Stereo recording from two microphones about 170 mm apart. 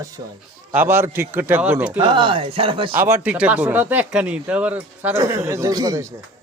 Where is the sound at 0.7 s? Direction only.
10° right (ahead or behind).